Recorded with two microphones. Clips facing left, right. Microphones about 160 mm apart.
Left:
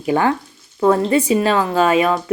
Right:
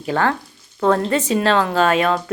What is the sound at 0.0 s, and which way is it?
Speech, 10° left (ahead or behind).